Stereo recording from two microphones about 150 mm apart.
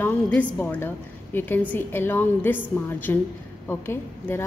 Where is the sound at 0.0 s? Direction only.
10° left (ahead or behind).